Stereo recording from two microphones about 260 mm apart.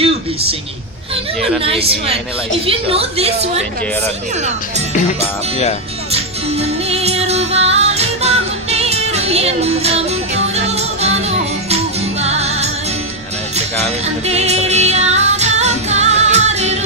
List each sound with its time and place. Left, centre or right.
1.6 s a woman's voice: right
6.1 s music: right
14.0 s music: right